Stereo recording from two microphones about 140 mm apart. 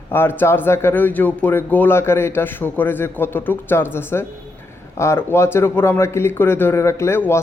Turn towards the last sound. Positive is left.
turn(degrees=15)  # may be behind; listen again after turning